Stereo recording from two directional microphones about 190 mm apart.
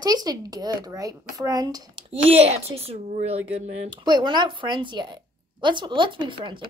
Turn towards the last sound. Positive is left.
turn(degrees=-25)  # may be behind; listen again after turning